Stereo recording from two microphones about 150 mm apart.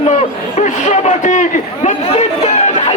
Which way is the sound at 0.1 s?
50° left (ahead or behind).